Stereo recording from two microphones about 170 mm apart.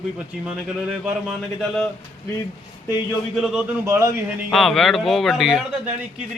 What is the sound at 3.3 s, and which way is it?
Speech, centre (ahead or behind).